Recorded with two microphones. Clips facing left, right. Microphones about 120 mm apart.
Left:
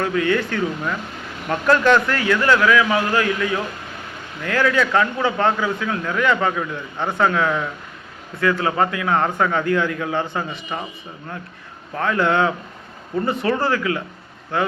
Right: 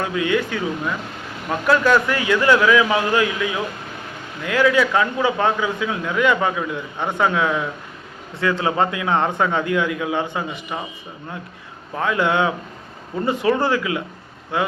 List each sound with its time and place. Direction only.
0.0 s a man's voice: 15° right (ahead or behind)
11.9 s a man's voice: 15° right (ahead or behind)